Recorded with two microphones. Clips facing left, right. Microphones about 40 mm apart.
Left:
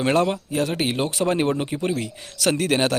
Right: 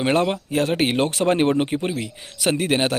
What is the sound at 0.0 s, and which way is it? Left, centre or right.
Speech, right.